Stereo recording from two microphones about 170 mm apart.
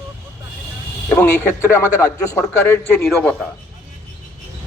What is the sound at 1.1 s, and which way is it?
A man's voice, 10° left (ahead or behind).